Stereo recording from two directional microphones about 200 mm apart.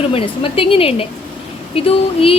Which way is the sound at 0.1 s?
25° left (ahead or behind).